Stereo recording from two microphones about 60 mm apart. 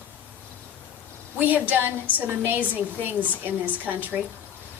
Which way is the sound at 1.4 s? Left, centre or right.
Right.